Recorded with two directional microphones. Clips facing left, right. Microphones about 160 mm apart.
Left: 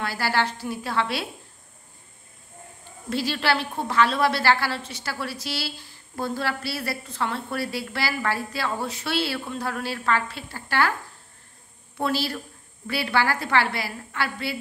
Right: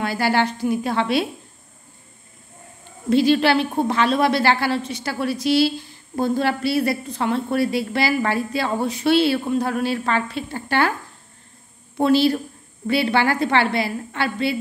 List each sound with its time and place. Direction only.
0.0 s a woman's voice: 20° right (ahead or behind)
3.1 s a woman's voice: 20° right (ahead or behind)
12.0 s a woman's voice: 20° right (ahead or behind)